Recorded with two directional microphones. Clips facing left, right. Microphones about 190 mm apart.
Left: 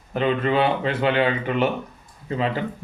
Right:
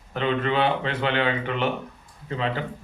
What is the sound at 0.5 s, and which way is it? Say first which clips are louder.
Speech: left 3 dB; 10° left (ahead or behind).